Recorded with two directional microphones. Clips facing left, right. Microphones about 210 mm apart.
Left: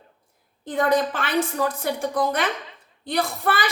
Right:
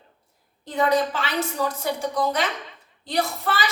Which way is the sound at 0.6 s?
50° left (ahead or behind).